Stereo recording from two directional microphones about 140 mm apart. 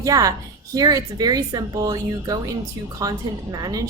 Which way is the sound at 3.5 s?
25° right (ahead or behind).